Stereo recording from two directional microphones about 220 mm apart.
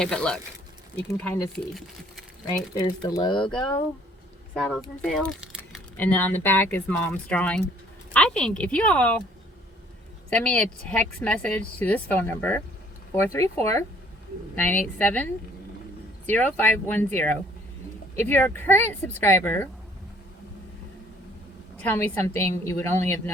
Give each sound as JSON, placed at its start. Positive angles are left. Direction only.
{"t": 0.0, "sound": "speech", "side_deg": 5}
{"t": 2.7, "sound": "speech", "side_deg": 20}
{"t": 4.5, "sound": "speech", "side_deg": 0}
{"t": 5.0, "sound": "a sound", "side_deg": 0}
{"t": 6.0, "sound": "speech", "side_deg": 10}
{"t": 10.2, "sound": "speech", "side_deg": 5}
{"t": 21.8, "sound": "speech", "side_deg": 10}